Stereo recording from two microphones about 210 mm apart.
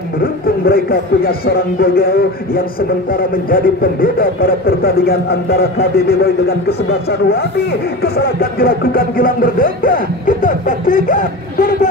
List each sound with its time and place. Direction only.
0.7 s speech: 45° left (ahead or behind)